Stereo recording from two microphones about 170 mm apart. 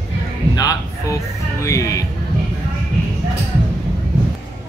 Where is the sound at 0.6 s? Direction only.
20° left (ahead or behind).